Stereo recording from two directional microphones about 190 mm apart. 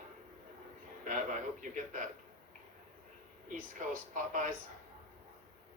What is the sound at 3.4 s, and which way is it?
Speech, 45° right (ahead or behind).